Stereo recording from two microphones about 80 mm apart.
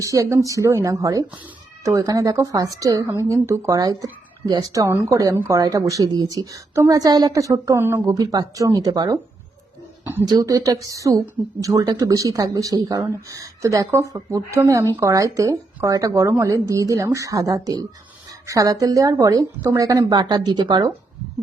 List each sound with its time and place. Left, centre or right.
0.0 s a woman's voice: right
3.8 s speech: right
7.8 s a woman's voice: right
8.0 s speech: right
10.0 s a sound: right
10.2 s speech: right
20.1 s speech: right